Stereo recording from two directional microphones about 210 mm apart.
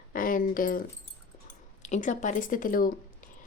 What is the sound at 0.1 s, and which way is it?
Speech, 40° left (ahead or behind).